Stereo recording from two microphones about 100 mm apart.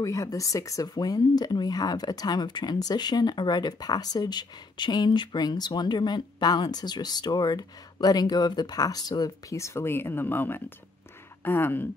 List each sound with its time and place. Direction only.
0.0 s speech: 35° left (ahead or behind)